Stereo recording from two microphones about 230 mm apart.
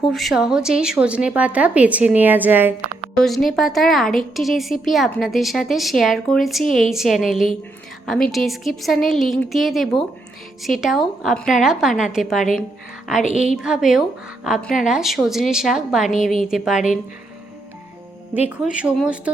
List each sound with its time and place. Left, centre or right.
0.0 s speech: centre
13.6 s speech: centre
16.1 s a woman's voice: left
16.4 s speech: centre
18.3 s speech: centre